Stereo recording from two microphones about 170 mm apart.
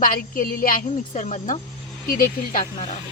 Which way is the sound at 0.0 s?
55° left (ahead or behind).